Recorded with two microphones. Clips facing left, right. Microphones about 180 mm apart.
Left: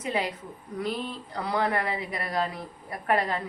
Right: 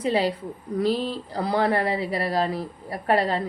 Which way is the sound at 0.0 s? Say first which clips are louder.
Right 7 dB; 30° right (ahead or behind).